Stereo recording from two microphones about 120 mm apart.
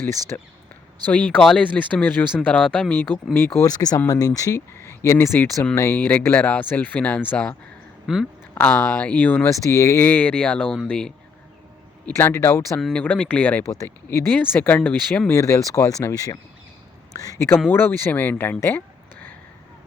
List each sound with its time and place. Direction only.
0.3 s speech: 15° left (ahead or behind)
3.6 s speech: 30° left (ahead or behind); by 7.5 s 10° left (ahead or behind)
8.0 s speech: 5° right (ahead or behind)
8.5 s speech: 15° left (ahead or behind)
9.5 s speech: 25° left (ahead or behind); by 11.1 s 5° left (ahead or behind)
12.1 s speech: 20° left (ahead or behind)
12.7 s speech: 10° left (ahead or behind)
15.3 s speech: 25° left (ahead or behind)